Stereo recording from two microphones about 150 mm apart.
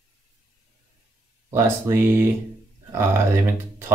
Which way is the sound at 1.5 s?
15° right (ahead or behind).